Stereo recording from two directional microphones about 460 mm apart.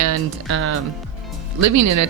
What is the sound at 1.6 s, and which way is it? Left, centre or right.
Speech, right.